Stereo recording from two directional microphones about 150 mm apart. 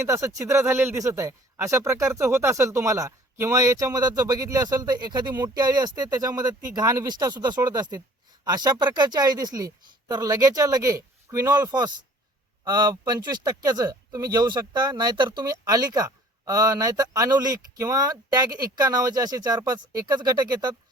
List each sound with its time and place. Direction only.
0.0 s a man's voice: 20° right (ahead or behind)